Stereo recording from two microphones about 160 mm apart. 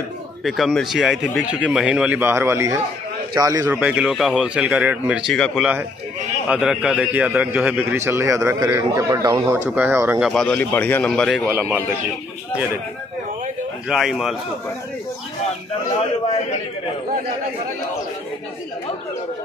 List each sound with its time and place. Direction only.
0.4 s a man's voice: centre (ahead or behind); by 3.7 s 20° right (ahead or behind)
3.7 s a man's voice: 5° right (ahead or behind); by 9.6 s 25° right (ahead or behind)
9.7 s a man's voice: 15° right (ahead or behind)
10.3 s speech: 5° left (ahead or behind)
11.4 s a man's voice: 10° right (ahead or behind)
13.8 s speech: centre (ahead or behind)